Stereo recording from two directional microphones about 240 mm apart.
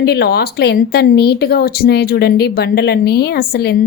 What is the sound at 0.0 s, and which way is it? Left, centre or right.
A woman's voice, left.